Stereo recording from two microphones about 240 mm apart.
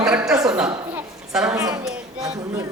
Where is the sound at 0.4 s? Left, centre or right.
Centre.